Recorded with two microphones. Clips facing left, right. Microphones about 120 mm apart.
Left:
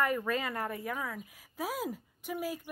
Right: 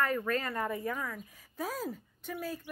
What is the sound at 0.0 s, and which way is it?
A woman's voice, 10° left (ahead or behind).